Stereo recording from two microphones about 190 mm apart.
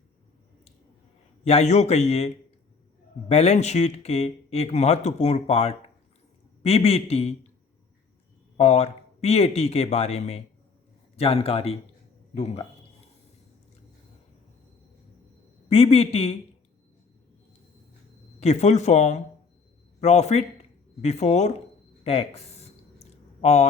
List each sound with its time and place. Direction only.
1.5 s speech: 35° left (ahead or behind)
8.5 s speech: 35° left (ahead or behind)
15.7 s speech: 30° left (ahead or behind)
18.3 s speech: 35° left (ahead or behind)
22.0 s a sound: 30° left (ahead or behind)